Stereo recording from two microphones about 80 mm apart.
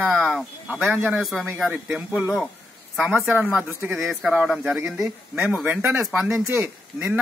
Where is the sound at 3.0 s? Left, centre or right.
Centre.